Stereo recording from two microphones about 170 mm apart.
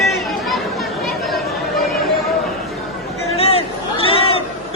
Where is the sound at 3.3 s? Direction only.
35° left (ahead or behind).